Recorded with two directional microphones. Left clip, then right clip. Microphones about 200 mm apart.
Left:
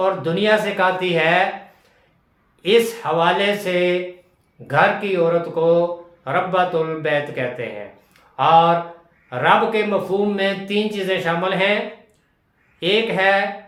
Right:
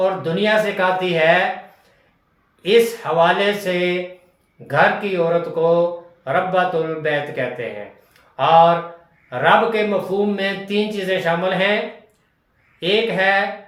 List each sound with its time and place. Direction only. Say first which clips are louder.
0.0 s speech: even; 20° left (ahead or behind)
2.6 s speech: right 1 dB; 20° left (ahead or behind)
12.8 s speech: even; 20° left (ahead or behind)